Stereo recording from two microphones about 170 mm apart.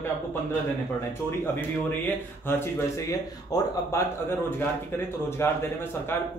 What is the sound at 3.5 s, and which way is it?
Speech, 15° left (ahead or behind).